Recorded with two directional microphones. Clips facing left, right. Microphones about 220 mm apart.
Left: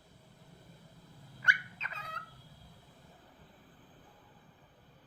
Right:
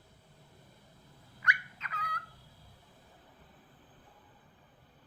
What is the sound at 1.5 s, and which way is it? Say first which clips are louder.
Dog: right 1 dB; 25° left (ahead or behind).